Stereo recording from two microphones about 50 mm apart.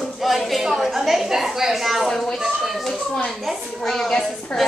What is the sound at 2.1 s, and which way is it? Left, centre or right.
Speech, centre.